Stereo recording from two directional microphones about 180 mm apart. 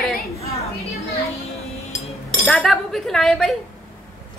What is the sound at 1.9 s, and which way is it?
Chink, 15° left (ahead or behind).